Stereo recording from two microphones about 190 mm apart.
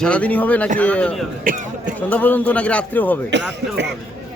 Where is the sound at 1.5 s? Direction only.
45° right (ahead or behind).